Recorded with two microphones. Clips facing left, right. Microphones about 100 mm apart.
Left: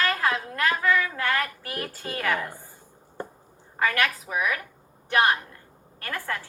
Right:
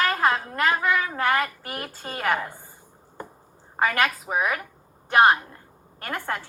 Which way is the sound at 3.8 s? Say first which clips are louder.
Right 2 dB; 25° right (ahead or behind).